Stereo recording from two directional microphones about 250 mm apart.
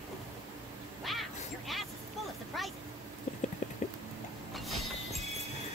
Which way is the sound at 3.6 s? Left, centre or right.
Left.